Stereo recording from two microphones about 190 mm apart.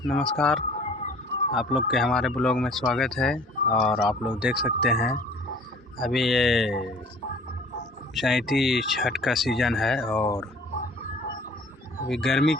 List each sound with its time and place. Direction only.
0.1 s speech: centre (ahead or behind)
0.8 s a sound: 35° left (ahead or behind)
1.5 s speech: centre (ahead or behind)
8.1 s speech: centre (ahead or behind)
12.0 s speech: centre (ahead or behind)